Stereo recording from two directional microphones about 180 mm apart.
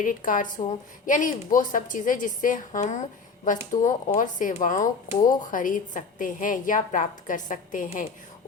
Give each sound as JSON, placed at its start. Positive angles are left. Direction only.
{"t": 0.0, "sound": "a woman's voice", "side_deg": 50}